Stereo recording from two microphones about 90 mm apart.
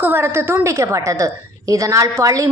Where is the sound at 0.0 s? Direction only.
25° right (ahead or behind).